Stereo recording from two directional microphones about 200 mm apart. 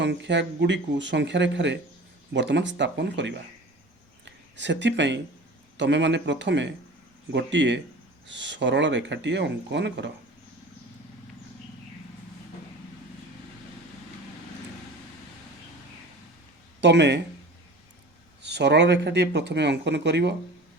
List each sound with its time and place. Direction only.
0.0 s speech: 60° right (ahead or behind)
16.8 s speech: 60° right (ahead or behind)
18.4 s speech: 60° right (ahead or behind)